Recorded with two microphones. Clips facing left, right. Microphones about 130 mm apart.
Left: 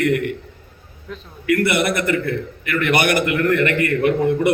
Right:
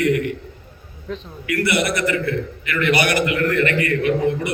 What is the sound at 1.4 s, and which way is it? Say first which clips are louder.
A man's voice: left 3 dB; 55° left (ahead or behind).